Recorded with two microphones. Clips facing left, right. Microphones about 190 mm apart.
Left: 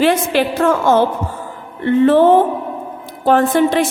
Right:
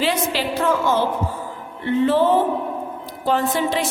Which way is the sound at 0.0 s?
50° left (ahead or behind).